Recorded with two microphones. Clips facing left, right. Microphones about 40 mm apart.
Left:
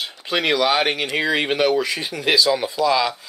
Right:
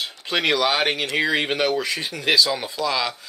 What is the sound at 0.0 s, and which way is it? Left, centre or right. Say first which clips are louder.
Speech: left 1 dB; centre.